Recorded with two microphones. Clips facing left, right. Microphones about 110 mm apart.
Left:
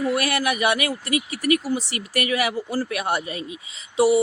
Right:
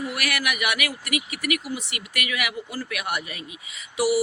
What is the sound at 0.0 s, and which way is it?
Speech, 30° left (ahead or behind).